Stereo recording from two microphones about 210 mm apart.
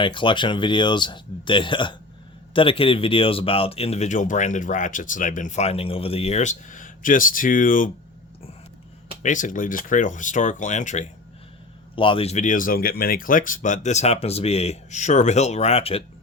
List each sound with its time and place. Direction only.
0.0 s speech: 25° left (ahead or behind); by 7.9 s 40° left (ahead or behind)
9.2 s speech: 40° left (ahead or behind)
11.9 s speech: 25° left (ahead or behind)